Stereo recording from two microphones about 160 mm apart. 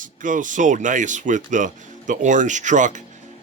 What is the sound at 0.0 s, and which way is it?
Speech, 55° right (ahead or behind).